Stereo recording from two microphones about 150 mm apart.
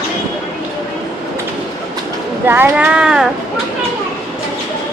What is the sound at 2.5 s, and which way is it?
Speech, 15° right (ahead or behind).